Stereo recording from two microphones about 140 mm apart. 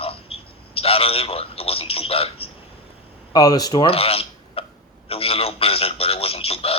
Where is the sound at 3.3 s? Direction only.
30° left (ahead or behind).